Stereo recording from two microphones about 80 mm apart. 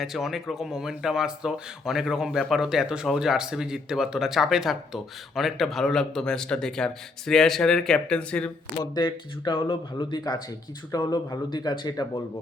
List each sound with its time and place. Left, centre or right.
0.0 s speech: centre
8.8 s speech: left
10.9 s speech: left